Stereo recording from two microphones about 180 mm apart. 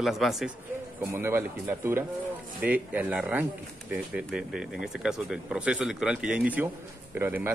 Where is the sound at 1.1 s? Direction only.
15° right (ahead or behind).